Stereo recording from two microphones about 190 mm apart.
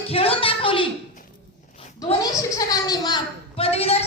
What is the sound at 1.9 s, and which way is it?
A child's voice, 20° left (ahead or behind).